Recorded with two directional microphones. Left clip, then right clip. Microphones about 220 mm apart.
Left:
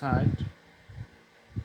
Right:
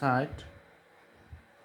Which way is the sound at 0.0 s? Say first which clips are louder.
Right 2 dB; 25° right (ahead or behind).